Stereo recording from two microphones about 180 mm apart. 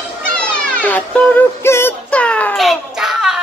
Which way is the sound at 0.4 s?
5° left (ahead or behind).